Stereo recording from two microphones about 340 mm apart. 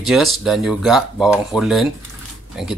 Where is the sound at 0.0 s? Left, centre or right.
Centre.